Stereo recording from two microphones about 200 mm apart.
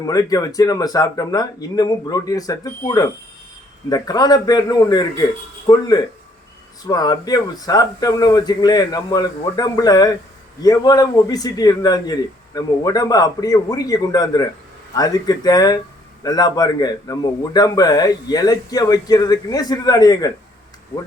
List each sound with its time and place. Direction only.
0.0 s a man's voice: 20° left (ahead or behind)
6.8 s a man's voice: 20° left (ahead or behind)